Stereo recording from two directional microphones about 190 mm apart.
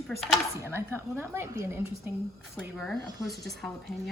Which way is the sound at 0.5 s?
15° right (ahead or behind).